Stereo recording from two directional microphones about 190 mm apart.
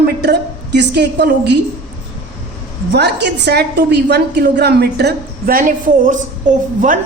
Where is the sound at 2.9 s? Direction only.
60° right (ahead or behind).